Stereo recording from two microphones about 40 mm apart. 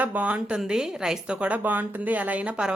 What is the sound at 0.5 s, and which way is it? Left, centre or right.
Speech, centre.